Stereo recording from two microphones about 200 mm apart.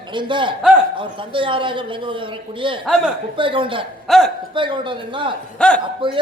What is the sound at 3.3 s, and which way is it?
Speech, 25° right (ahead or behind).